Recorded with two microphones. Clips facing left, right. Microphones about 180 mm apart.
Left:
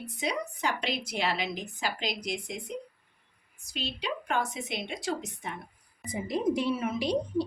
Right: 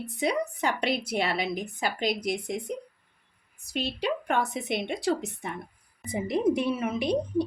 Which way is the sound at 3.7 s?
60° right (ahead or behind).